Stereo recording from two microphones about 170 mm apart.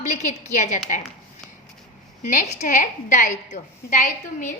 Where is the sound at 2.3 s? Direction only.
45° left (ahead or behind).